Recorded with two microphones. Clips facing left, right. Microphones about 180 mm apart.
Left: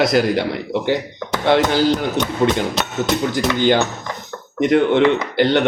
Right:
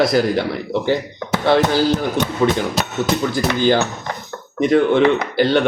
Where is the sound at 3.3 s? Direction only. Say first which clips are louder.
Even; 20° left (ahead or behind).